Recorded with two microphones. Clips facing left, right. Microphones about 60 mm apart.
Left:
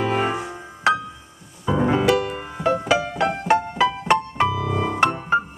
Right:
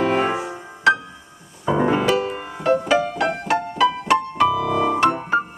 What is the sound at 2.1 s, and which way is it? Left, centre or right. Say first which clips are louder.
Music: right 1 dB; right.